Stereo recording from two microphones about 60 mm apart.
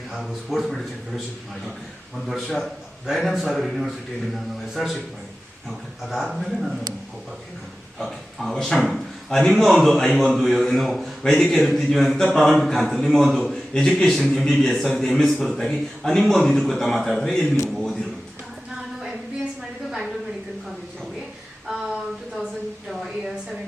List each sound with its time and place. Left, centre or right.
0.1 s speech: centre
2.2 s speech: centre
7.9 s a man's voice: centre
21.7 s a sound: centre